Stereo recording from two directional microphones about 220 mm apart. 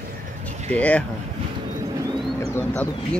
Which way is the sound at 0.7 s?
5° left (ahead or behind).